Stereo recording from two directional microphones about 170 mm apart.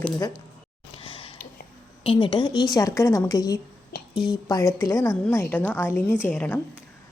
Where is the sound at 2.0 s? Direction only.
30° left (ahead or behind).